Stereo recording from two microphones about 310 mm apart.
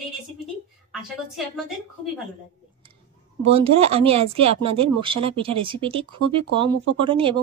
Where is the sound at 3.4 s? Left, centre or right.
Centre.